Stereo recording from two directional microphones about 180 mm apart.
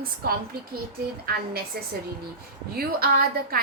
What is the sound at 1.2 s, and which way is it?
A woman's voice, 60° right (ahead or behind).